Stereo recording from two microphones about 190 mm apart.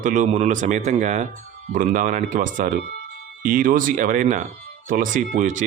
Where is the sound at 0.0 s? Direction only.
40° right (ahead or behind).